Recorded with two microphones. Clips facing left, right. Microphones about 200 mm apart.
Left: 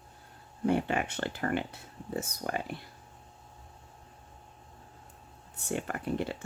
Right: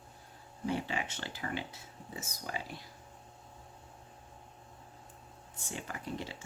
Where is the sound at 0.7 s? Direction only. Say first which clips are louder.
Left 7 dB; 60° left (ahead or behind).